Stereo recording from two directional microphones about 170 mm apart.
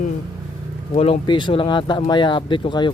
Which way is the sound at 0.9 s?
35° left (ahead or behind).